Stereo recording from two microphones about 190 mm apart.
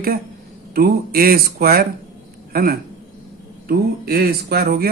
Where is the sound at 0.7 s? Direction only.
50° right (ahead or behind).